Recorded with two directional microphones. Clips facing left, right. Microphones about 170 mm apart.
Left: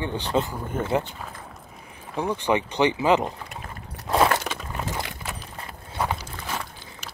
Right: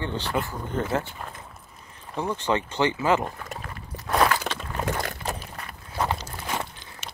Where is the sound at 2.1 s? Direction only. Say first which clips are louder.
Left 2 dB; 15° left (ahead or behind).